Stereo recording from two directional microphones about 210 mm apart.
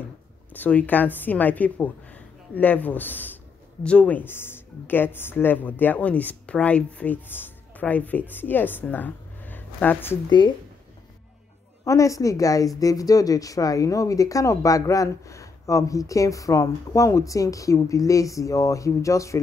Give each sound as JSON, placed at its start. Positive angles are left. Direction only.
{"t": 0.5, "sound": "a woman's voice", "side_deg": 5}
{"t": 11.8, "sound": "a woman's voice", "side_deg": 15}